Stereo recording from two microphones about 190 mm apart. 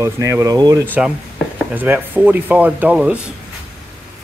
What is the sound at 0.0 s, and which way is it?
Speech, 15° right (ahead or behind).